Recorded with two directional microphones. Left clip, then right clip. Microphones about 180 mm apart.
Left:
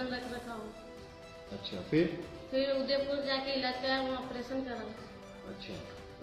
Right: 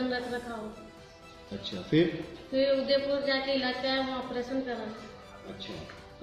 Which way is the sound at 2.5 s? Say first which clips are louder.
Right 5 dB; 25° left (ahead or behind).